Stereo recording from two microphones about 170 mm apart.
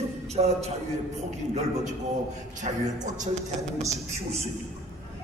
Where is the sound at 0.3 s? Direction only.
40° right (ahead or behind).